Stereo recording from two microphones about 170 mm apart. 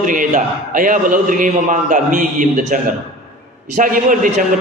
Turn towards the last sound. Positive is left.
turn(degrees=-50)  # may be behind; listen again after turning